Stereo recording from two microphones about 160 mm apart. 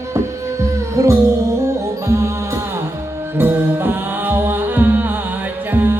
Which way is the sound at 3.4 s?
15° right (ahead or behind).